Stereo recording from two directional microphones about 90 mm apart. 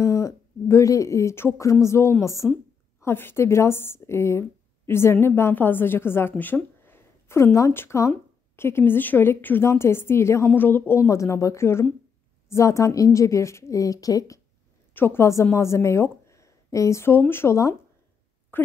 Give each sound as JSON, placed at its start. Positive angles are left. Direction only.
{"t": 0.0, "sound": "a woman's voice", "side_deg": 35}
{"t": 15.0, "sound": "a woman's voice", "side_deg": 25}